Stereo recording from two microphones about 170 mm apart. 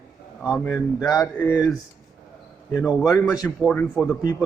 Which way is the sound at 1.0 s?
20° left (ahead or behind).